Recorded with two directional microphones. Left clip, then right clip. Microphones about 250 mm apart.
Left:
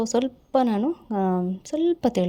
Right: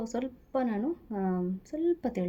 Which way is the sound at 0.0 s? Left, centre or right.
Left.